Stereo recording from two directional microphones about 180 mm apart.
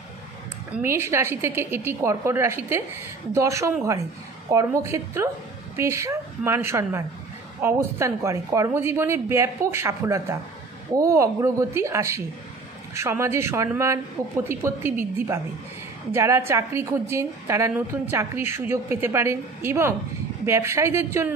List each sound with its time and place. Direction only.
0.8 s a woman's voice: 15° right (ahead or behind)